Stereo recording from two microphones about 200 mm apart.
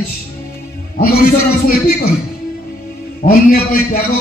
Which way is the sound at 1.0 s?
50° left (ahead or behind).